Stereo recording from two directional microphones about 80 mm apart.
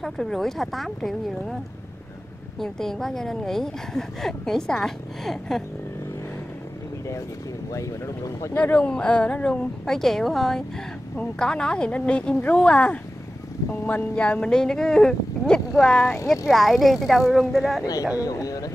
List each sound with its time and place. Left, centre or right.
0.0 s a woman's voice: centre
2.6 s a woman's voice: centre
8.5 s a woman's voice: centre
18.2 s speech: left